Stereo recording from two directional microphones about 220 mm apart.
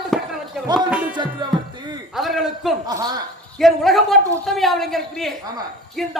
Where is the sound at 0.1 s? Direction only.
Centre (ahead or behind).